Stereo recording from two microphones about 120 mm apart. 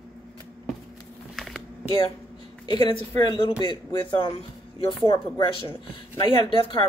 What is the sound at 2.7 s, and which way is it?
A man's voice, 40° left (ahead or behind).